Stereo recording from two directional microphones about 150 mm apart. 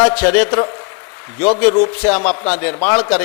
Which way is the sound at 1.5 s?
10° left (ahead or behind).